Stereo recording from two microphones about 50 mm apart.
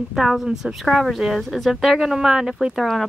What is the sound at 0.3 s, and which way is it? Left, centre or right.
Speech, centre.